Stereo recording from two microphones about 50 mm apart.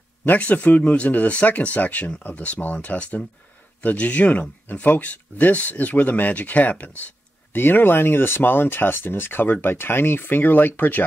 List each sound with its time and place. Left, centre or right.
0.2 s speech: left
7.5 s speech: left